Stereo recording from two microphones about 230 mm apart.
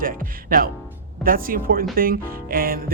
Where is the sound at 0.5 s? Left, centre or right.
Right.